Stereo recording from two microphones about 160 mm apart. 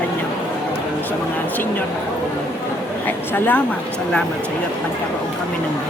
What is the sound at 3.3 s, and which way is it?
Speech, 10° left (ahead or behind).